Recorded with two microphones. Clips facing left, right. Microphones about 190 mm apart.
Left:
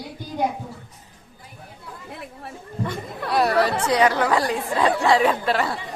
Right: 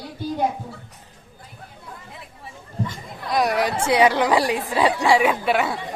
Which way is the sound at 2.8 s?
65° left (ahead or behind).